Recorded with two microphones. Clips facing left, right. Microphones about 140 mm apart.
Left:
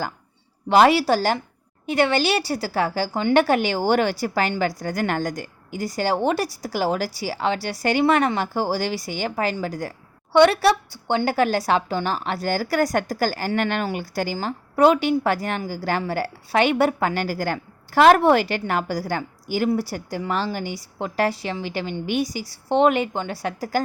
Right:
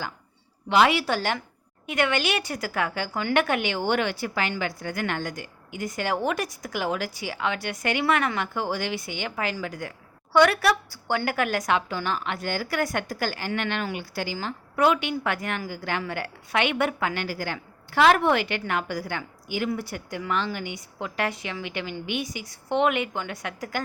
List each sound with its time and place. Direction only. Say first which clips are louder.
0.7 s a woman's voice: left 5 dB; 40° left (ahead or behind)
14.3 s a woman's voice: left 5 dB; 35° left (ahead or behind)